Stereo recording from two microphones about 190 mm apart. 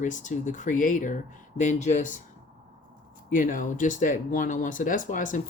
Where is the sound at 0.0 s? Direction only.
40° left (ahead or behind).